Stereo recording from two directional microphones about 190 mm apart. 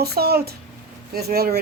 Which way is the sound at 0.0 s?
55° right (ahead or behind).